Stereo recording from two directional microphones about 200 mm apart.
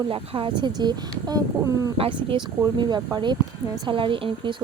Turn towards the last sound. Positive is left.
turn(degrees=-25)  # may be behind; listen again after turning